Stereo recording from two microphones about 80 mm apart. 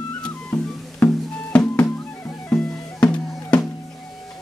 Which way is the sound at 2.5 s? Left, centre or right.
Centre.